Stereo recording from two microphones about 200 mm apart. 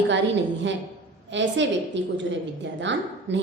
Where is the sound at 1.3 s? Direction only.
65° right (ahead or behind).